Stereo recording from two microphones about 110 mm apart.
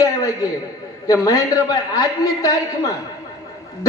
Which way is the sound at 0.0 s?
35° left (ahead or behind).